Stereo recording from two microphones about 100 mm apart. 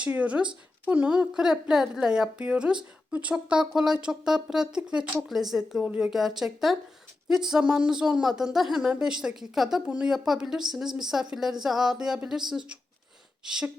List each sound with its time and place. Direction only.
0.0 s a woman's voice: 15° right (ahead or behind)